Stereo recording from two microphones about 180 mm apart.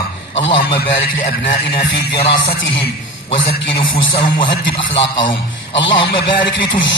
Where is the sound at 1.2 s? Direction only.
45° left (ahead or behind).